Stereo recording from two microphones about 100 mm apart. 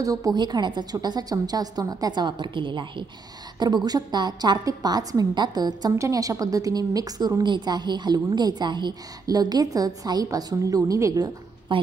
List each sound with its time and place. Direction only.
0.0 s a woman's voice: 35° right (ahead or behind)
11.7 s a woman's voice: 55° right (ahead or behind)